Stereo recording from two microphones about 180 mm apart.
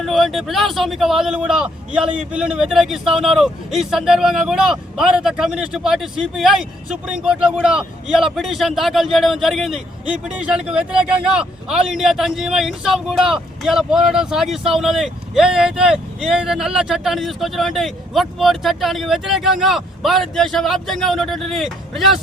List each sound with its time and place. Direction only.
0.0 s speech: centre (ahead or behind)